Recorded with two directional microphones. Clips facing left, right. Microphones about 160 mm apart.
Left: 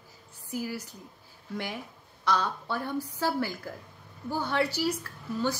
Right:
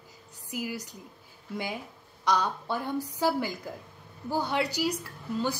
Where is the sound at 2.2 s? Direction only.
15° right (ahead or behind).